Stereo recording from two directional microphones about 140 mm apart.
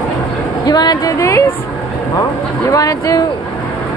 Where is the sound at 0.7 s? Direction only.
30° left (ahead or behind).